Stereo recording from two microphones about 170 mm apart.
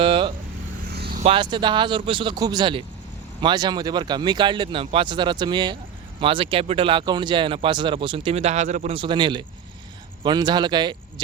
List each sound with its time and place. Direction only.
0.0 s vehicle: 30° right (ahead or behind)
0.9 s vehicle: 65° right (ahead or behind)
1.2 s speech: 30° right (ahead or behind)
9.0 s speech: 30° right (ahead or behind)